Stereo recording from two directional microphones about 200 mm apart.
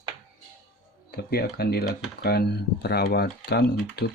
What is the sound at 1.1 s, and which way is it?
Speech, 50° left (ahead or behind).